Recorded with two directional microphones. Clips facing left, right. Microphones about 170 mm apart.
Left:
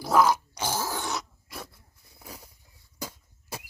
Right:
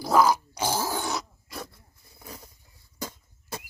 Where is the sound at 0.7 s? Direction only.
15° right (ahead or behind).